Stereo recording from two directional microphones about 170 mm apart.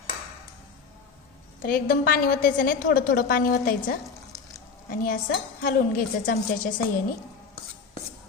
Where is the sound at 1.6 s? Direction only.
55° left (ahead or behind).